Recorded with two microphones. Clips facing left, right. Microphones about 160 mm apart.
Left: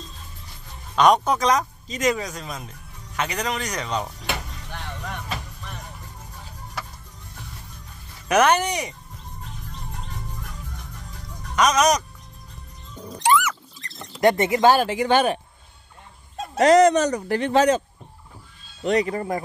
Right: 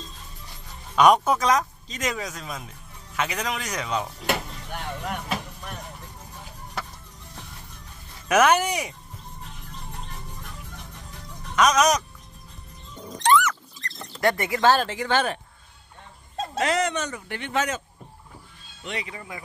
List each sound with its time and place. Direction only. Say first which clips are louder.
0.9 s speech: even; 10° right (ahead or behind)
4.6 s music: right 3 dB; 10° right (ahead or behind)
8.3 s speech: left 1 dB; 5° right (ahead or behind)
11.5 s speech: left 1 dB; centre (ahead or behind)
13.2 s dog: even; 10° left (ahead or behind)
14.2 s speech: left 4 dB; 25° left (ahead or behind)
16.5 s speech: left 10 dB; 40° left (ahead or behind)